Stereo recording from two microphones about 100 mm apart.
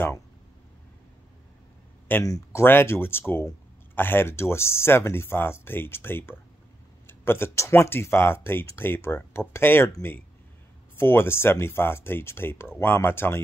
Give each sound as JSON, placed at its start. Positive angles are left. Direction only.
{"t": 2.2, "sound": "speech", "side_deg": 35}
{"t": 2.6, "sound": "speech", "side_deg": 25}
{"t": 11.0, "sound": "speech", "side_deg": 25}